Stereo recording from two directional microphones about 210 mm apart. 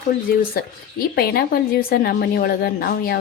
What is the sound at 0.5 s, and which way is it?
A woman's voice, 45° left (ahead or behind).